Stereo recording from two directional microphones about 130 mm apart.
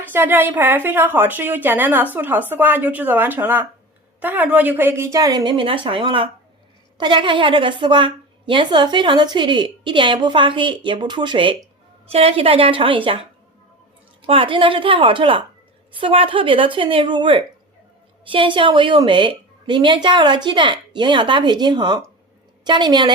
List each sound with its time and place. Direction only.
0.0 s a woman's voice: 15° right (ahead or behind)
5.1 s a woman's voice: 30° right (ahead or behind)
12.0 s a woman's voice: 50° right (ahead or behind); by 23.1 s 35° right (ahead or behind)